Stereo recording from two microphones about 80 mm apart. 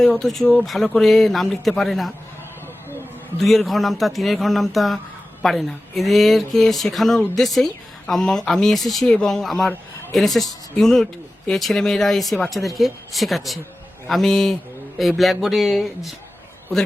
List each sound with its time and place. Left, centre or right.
0.0 s a man's voice: centre
3.3 s a man's voice: centre